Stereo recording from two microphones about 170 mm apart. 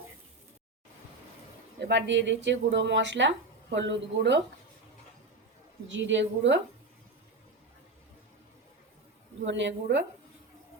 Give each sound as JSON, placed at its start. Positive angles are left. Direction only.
{"t": 1.8, "sound": "speech", "side_deg": -90}
{"t": 5.9, "sound": "speech", "side_deg": -90}
{"t": 9.5, "sound": "speech", "side_deg": -90}